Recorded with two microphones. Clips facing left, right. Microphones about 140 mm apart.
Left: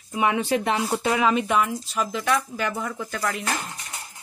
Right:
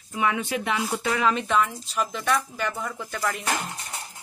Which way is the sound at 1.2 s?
10° left (ahead or behind).